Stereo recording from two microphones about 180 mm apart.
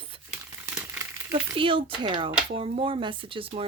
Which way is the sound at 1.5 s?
30° right (ahead or behind).